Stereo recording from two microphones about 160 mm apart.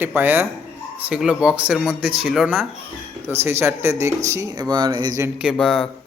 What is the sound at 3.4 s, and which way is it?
A man's voice, 15° right (ahead or behind).